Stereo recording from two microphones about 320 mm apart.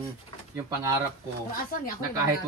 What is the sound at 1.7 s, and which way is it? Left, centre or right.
Speech, left.